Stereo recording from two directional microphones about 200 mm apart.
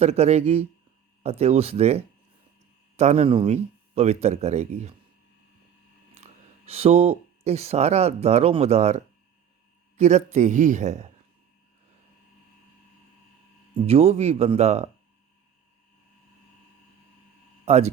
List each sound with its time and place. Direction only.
0.0 s speech: 30° right (ahead or behind)
6.7 s speech: 30° right (ahead or behind)
10.0 s speech: 35° right (ahead or behind)
13.7 s speech: 30° right (ahead or behind)
17.7 s speech: 30° right (ahead or behind)